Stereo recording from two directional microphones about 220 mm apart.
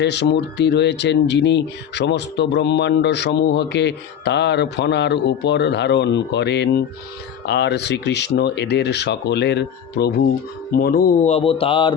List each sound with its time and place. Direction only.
0.0 s speech: 50° left (ahead or behind); by 11.9 s 25° left (ahead or behind)